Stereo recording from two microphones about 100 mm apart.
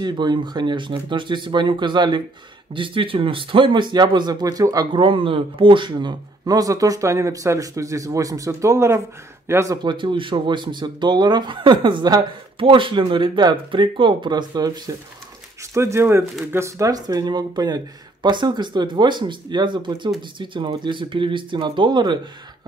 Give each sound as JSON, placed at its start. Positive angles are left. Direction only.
{"t": 0.0, "sound": "speech", "side_deg": -50}
{"t": 4.9, "sound": "speech", "side_deg": -60}
{"t": 9.8, "sound": "speech", "side_deg": -55}
{"t": 12.5, "sound": "speech", "side_deg": -60}
{"t": 15.7, "sound": "speech", "side_deg": -25}